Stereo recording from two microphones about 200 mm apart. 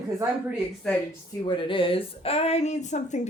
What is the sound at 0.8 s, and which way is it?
Speech, 5° left (ahead or behind).